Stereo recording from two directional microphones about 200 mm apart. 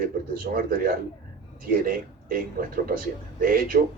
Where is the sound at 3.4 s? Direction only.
45° right (ahead or behind).